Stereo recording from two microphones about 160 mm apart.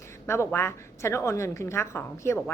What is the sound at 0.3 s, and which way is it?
A woman's voice, 15° left (ahead or behind).